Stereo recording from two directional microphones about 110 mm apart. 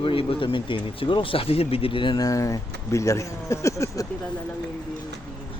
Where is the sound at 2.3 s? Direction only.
30° left (ahead or behind).